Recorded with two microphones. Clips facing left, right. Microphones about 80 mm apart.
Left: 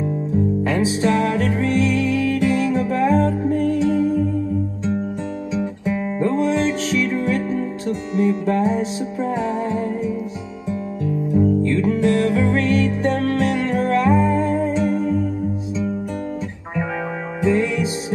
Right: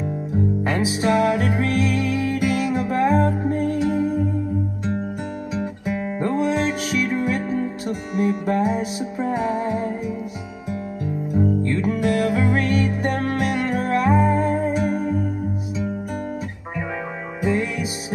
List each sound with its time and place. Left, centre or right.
0.3 s music: centre
6.3 s music: centre
11.3 s music: centre
17.4 s music: centre